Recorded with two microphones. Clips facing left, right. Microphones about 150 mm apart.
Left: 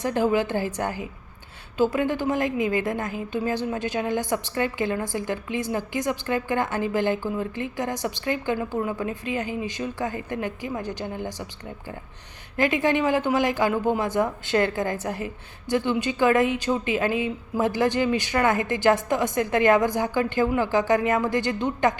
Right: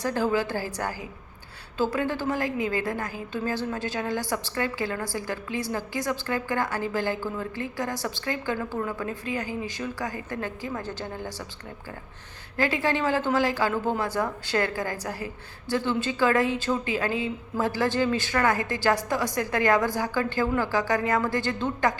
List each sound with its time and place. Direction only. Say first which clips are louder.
0.0 s a woman's voice: left 3 dB; 20° left (ahead or behind)
12.5 s a woman's voice: left 3 dB; 20° left (ahead or behind)